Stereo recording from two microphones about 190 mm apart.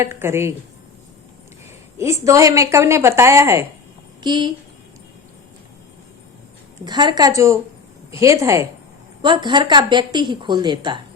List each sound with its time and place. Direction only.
0.0 s a woman's voice: 15° right (ahead or behind)
2.0 s a woman's voice: 15° right (ahead or behind)
6.8 s a woman's voice: 20° right (ahead or behind)